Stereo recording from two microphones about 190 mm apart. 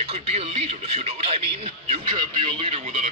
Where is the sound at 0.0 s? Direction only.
30° right (ahead or behind).